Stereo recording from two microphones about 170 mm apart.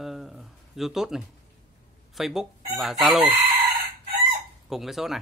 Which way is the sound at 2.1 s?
Centre (ahead or behind).